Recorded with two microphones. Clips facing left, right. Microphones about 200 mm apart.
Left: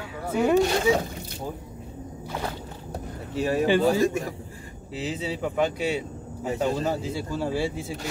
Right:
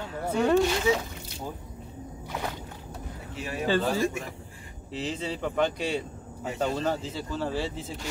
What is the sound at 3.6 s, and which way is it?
Speech, 15° left (ahead or behind).